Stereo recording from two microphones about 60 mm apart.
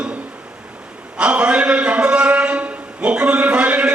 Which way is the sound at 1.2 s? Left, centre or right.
Centre.